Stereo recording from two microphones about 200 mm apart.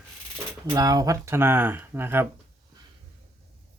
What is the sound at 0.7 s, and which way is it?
Speech, 20° right (ahead or behind).